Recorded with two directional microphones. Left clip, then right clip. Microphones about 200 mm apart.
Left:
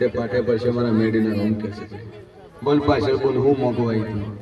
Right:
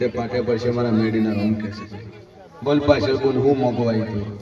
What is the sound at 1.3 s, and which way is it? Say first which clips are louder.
Speech: even; 10° left (ahead or behind).